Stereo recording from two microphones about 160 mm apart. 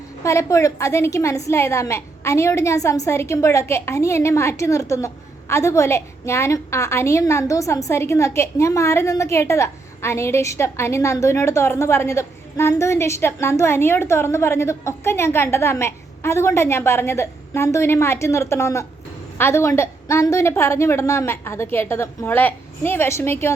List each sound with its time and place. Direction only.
0.2 s a woman's voice: 20° left (ahead or behind)